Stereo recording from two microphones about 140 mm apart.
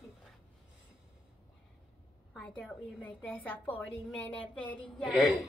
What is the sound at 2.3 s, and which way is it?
A woman's voice, 5° left (ahead or behind).